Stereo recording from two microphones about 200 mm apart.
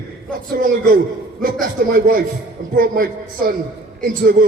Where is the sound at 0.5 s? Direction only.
45° right (ahead or behind).